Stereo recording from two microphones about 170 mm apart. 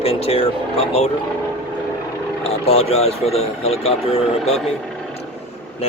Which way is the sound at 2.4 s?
35° left (ahead or behind).